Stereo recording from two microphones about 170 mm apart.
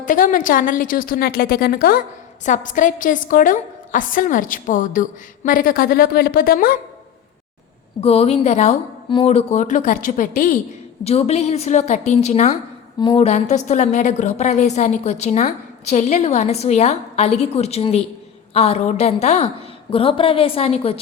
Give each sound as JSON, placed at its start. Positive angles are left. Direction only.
{"t": 0.0, "sound": "a woman's voice", "side_deg": 50}
{"t": 2.4, "sound": "a woman's voice", "side_deg": 50}
{"t": 8.0, "sound": "a woman's voice", "side_deg": 35}
{"t": 11.0, "sound": "a woman's voice", "side_deg": 40}
{"t": 13.0, "sound": "a woman's voice", "side_deg": 25}
{"t": 13.2, "sound": "a woman's voice", "side_deg": 45}